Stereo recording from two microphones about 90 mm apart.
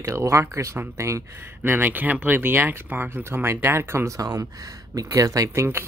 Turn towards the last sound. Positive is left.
turn(degrees=-30)  # may be behind; listen again after turning